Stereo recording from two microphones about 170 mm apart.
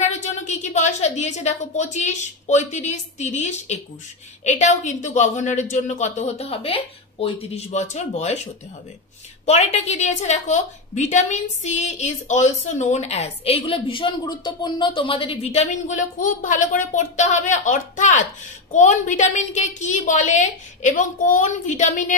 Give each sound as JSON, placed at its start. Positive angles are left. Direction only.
{"t": 0.0, "sound": "a woman's voice", "side_deg": 45}
{"t": 9.5, "sound": "a woman's voice", "side_deg": 40}